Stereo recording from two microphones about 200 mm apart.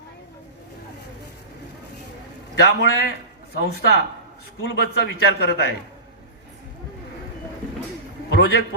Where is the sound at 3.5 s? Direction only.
55° left (ahead or behind).